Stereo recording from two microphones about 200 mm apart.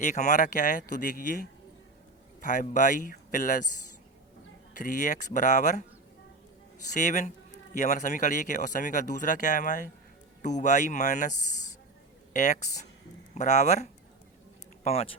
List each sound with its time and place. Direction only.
0.0 s a man's voice: 35° left (ahead or behind)
4.7 s a man's voice: 40° left (ahead or behind)
6.9 s a man's voice: 40° left (ahead or behind)